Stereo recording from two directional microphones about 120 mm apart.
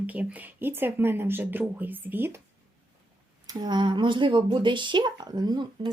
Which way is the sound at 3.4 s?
35° right (ahead or behind).